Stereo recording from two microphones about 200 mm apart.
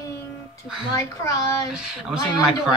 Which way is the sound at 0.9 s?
15° left (ahead or behind).